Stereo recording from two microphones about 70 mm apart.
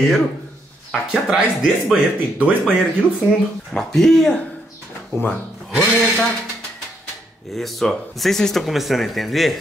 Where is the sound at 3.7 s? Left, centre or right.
Centre.